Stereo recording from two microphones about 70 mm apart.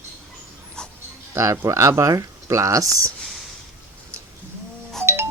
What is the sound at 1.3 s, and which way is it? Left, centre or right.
Speech, right.